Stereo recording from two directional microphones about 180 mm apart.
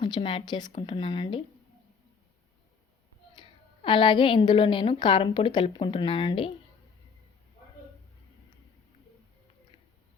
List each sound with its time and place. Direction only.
0.0 s a woman's voice: 30° left (ahead or behind)
3.3 s a woman's voice: 30° left (ahead or behind)